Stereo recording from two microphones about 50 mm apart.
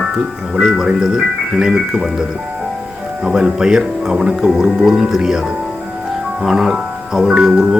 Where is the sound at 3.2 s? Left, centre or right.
Centre.